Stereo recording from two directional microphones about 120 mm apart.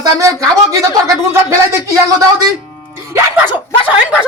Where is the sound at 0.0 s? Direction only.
30° right (ahead or behind).